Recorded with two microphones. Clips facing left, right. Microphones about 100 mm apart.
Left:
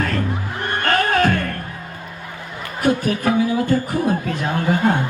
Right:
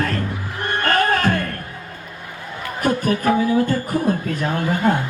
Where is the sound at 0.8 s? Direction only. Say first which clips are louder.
Left 1 dB; 40° right (ahead or behind).